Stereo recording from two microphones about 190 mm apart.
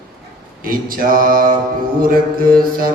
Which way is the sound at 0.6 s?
50° right (ahead or behind).